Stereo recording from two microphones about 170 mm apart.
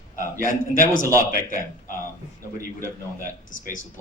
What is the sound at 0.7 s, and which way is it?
Speech, 50° left (ahead or behind).